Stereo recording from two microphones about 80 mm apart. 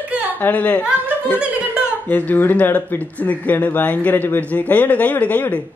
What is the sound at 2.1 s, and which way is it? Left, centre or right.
Speech, left.